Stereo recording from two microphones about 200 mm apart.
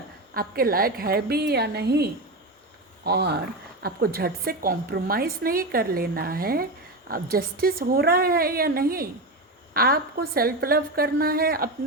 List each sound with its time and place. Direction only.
0.3 s a woman's voice: 45° right (ahead or behind)